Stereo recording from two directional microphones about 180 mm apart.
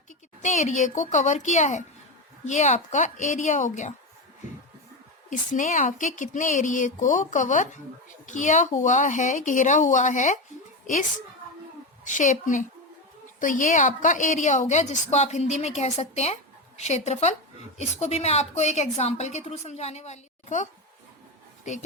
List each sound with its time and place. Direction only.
0.4 s a woman's voice: 40° left (ahead or behind)
5.3 s a woman's voice: 45° left (ahead or behind)
12.0 s a woman's voice: 45° left (ahead or behind)